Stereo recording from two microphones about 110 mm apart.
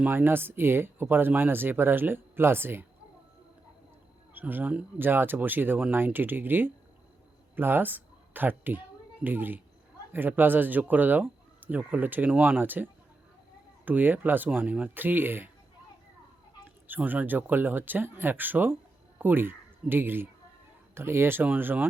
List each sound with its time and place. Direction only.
0.0 s speech: 20° right (ahead or behind)
4.4 s speech: 15° right (ahead or behind)
16.8 s speech: 15° right (ahead or behind)